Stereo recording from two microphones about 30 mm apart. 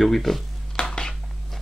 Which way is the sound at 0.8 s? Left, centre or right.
Left.